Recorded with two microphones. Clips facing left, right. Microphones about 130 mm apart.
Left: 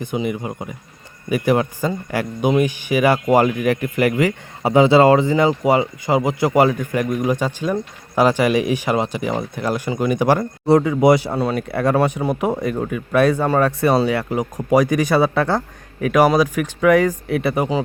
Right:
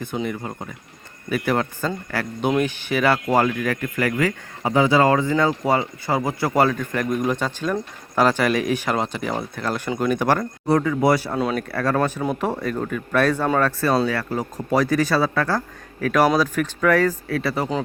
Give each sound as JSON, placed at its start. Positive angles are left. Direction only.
{"t": 0.0, "sound": "speech", "side_deg": 10}
{"t": 10.7, "sound": "speech", "side_deg": 20}
{"t": 11.3, "sound": "speech", "side_deg": 0}
{"t": 11.7, "sound": "speech", "side_deg": 20}
{"t": 16.0, "sound": "speech", "side_deg": 10}